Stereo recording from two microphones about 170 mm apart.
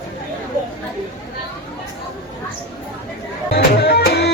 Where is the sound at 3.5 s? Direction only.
70° left (ahead or behind).